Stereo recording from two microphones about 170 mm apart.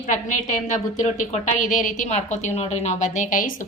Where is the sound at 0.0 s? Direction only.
50° left (ahead or behind).